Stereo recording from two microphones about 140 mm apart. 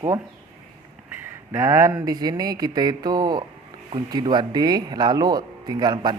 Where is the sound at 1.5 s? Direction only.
20° right (ahead or behind).